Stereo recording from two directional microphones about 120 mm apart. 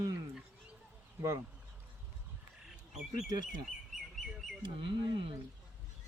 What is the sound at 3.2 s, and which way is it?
Speech, 35° right (ahead or behind).